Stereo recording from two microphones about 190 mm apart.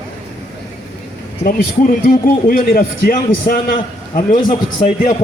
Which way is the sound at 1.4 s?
45° left (ahead or behind).